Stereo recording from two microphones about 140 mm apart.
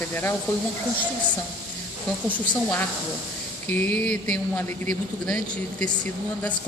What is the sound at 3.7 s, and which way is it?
A woman's voice, 10° left (ahead or behind).